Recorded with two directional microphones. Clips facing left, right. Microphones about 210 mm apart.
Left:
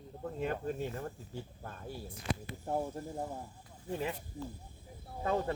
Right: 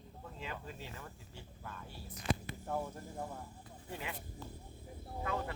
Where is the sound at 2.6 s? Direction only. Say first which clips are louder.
Left 5 dB; 30° left (ahead or behind).